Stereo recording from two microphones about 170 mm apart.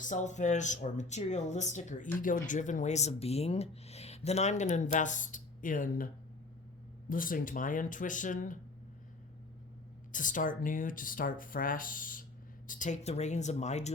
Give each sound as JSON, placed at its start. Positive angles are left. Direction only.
{"t": 0.0, "sound": "speech", "side_deg": 45}
{"t": 7.1, "sound": "speech", "side_deg": 55}
{"t": 10.1, "sound": "speech", "side_deg": 50}